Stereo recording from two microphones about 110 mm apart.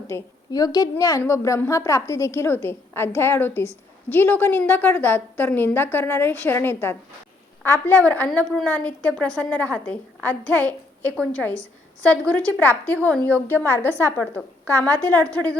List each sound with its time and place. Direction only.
0.1 s a woman's voice: 25° left (ahead or behind)
0.5 s a woman's voice: 35° left (ahead or behind); by 15.5 s 15° left (ahead or behind)